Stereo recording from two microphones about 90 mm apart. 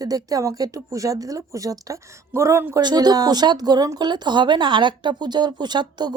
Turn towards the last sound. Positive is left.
turn(degrees=-55)  # may be behind; listen again after turning